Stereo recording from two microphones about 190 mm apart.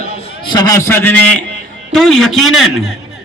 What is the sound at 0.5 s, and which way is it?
A man's voice, 20° left (ahead or behind).